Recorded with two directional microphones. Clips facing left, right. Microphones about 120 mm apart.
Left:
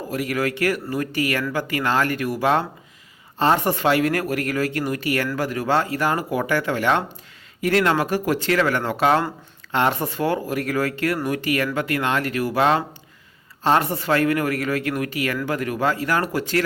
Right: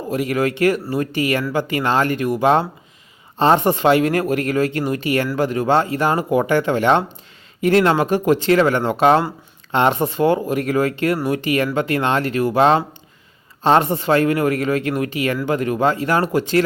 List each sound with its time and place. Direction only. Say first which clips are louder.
0.1 s speech: right 5 dB; 25° right (ahead or behind)